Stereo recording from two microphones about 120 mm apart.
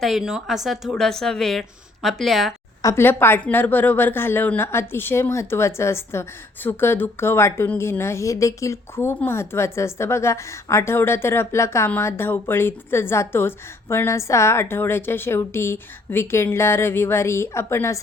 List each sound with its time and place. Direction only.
0.0 s speech: 5° right (ahead or behind)
2.8 s a woman's voice: 20° left (ahead or behind)